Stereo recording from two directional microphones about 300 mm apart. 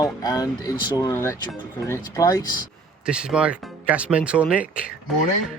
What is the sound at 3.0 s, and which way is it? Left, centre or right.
Speech, centre.